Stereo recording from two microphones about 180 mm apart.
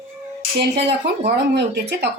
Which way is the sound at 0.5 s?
65° right (ahead or behind).